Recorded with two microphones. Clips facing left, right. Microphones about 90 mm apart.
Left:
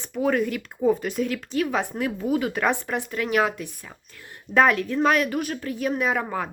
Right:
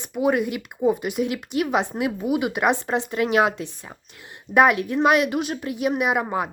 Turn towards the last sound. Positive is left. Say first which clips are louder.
# right 2 dB
turn(degrees=-15)  # may be behind; listen again after turning